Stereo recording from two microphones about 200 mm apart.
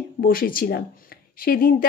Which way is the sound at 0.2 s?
45° left (ahead or behind).